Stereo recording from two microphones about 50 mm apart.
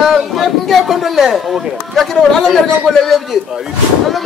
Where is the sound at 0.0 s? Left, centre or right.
Centre.